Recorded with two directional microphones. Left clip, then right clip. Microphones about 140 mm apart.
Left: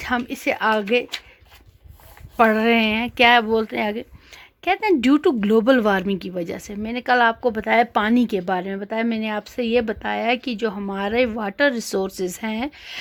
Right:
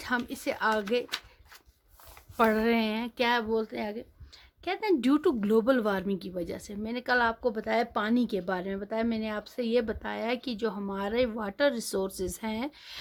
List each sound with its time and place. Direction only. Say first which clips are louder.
0.0 s speech: left 8 dB; 20° left (ahead or behind)
2.3 s speech: left 9 dB; 20° left (ahead or behind); by 4.0 s 45° left (ahead or behind)
4.4 s speech: left 12 dB; 25° left (ahead or behind)